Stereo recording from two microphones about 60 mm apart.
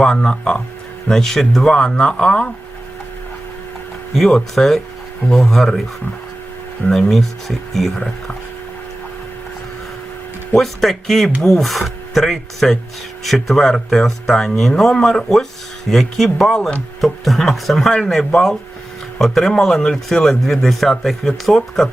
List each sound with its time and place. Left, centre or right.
0.0 s speech: centre
4.1 s speech: centre
6.9 s speech: centre
10.5 s speech: centre